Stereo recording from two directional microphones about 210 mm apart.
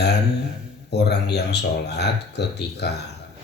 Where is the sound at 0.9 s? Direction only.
50° left (ahead or behind).